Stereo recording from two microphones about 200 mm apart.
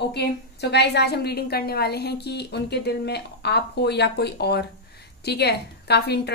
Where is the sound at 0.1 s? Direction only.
55° left (ahead or behind).